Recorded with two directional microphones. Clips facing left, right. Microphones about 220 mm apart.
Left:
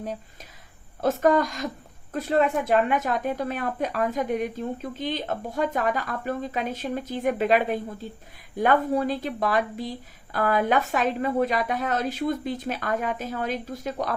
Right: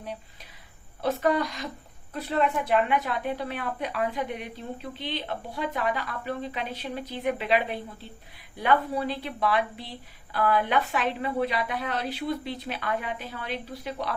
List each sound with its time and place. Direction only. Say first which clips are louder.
1.0 s a woman's voice: left 4 dB; 45° left (ahead or behind)